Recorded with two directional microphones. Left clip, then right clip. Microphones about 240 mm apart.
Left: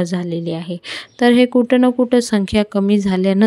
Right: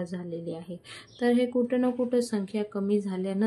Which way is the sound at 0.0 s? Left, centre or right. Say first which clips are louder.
Left 13 dB; left.